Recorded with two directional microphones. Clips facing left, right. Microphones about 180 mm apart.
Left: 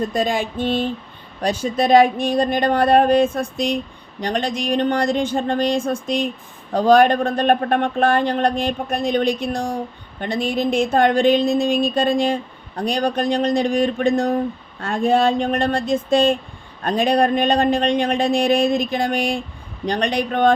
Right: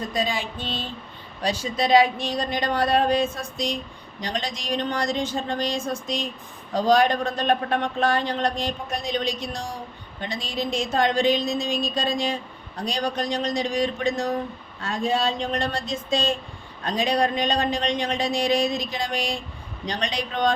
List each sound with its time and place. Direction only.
0.1 s speech: 50° left (ahead or behind)